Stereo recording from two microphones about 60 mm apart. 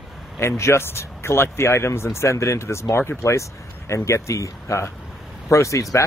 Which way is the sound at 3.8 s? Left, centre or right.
Left.